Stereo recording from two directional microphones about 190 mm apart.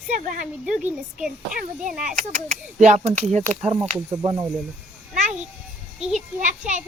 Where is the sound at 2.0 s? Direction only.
40° right (ahead or behind).